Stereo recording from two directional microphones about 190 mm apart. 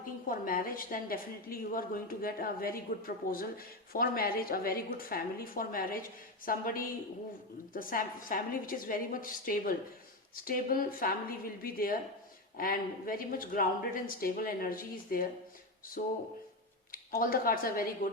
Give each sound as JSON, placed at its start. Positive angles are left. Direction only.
{"t": 0.0, "sound": "a woman's voice", "side_deg": 50}